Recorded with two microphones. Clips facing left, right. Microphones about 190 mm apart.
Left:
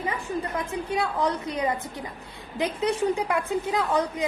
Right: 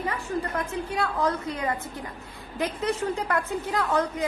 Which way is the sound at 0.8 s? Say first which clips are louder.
Left 1 dB; 15° left (ahead or behind).